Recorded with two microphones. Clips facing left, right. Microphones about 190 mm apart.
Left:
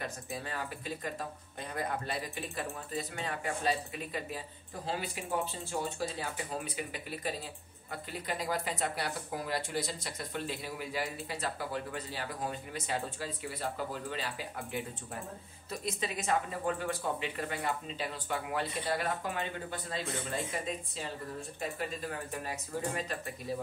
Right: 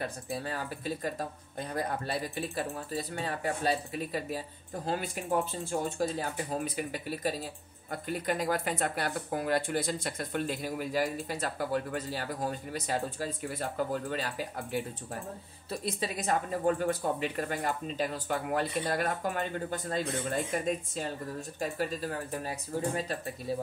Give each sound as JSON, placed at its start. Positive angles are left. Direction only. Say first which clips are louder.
{"t": 0.0, "sound": "speech", "louder": "right 4 dB", "side_deg": -35}